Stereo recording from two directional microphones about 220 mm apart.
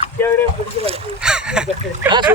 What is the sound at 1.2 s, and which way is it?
Speech, 5° right (ahead or behind).